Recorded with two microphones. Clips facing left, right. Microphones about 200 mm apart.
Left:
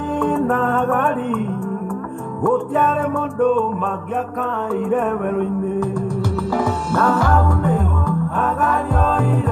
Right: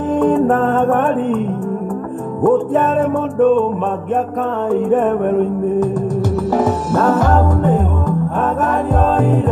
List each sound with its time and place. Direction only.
0.2 s music: 40° right (ahead or behind)
2.4 s music: 45° right (ahead or behind)
4.6 s music: 40° right (ahead or behind)
6.6 s music: 20° right (ahead or behind)
7.1 s music: 40° right (ahead or behind)